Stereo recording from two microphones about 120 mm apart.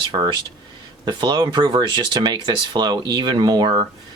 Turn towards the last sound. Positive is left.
turn(degrees=-40)  # may be behind; listen again after turning